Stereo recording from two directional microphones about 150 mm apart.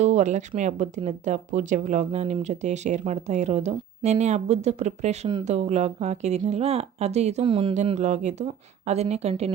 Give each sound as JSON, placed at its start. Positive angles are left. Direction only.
{"t": 0.0, "sound": "speech", "side_deg": -50}
{"t": 7.8, "sound": "speech", "side_deg": -50}